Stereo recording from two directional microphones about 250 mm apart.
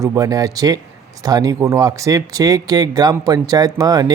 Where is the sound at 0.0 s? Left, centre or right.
Centre.